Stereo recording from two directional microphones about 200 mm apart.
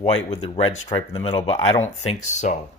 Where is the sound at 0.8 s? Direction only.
20° left (ahead or behind); by 2.5 s 35° left (ahead or behind).